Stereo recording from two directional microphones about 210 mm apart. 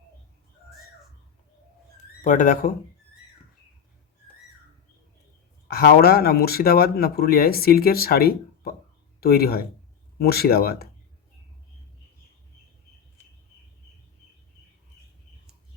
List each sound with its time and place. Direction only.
2.2 s speech: 40° left (ahead or behind)
5.6 s speech: 50° left (ahead or behind)